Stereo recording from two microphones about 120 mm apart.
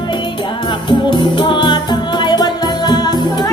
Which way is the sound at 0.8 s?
40° left (ahead or behind).